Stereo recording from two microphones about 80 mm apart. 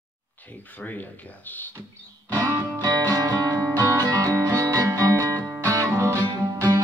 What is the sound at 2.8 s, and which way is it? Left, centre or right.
Music, right.